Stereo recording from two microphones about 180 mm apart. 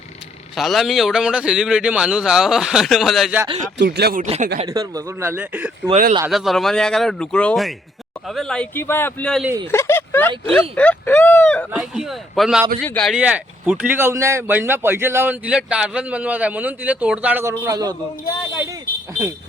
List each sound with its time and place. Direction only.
0.5 s a man's voice: centre (ahead or behind)
3.8 s speech: 65° right (ahead or behind)
4.2 s speech: 40° right (ahead or behind)
4.7 s a man's voice: 20° right (ahead or behind); by 11.6 s 10° left (ahead or behind)
11.7 s a man's voice: 5° right (ahead or behind)
13.1 s speech: 5° right (ahead or behind)
17.6 s a man's voice: 20° right (ahead or behind)